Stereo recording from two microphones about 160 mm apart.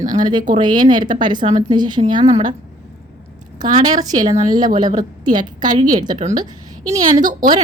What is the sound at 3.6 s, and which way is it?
Speech, 50° right (ahead or behind).